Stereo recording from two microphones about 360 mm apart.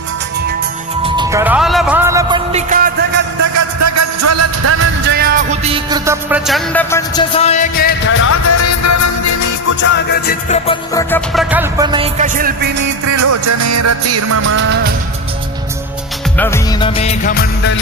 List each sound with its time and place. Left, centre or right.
1.0 s music: centre
3.8 s music: right
5.7 s music: centre; by 8.3 s left
8.3 s music: left
9.8 s music: left; by 11.4 s centre
11.5 s music: centre; by 12.7 s right
12.8 s music: right
16.4 s music: centre; by 17.7 s left